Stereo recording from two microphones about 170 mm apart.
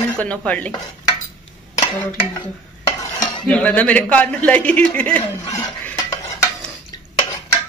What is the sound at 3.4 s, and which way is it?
A man's voice, 5° left (ahead or behind).